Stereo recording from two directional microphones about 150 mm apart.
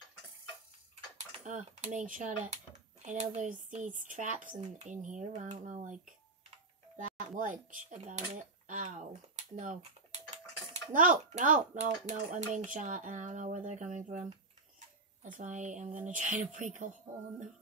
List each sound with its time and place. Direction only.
1.4 s speech: 55° right (ahead or behind)
10.7 s speech: 60° right (ahead or behind)
15.2 s speech: 60° right (ahead or behind)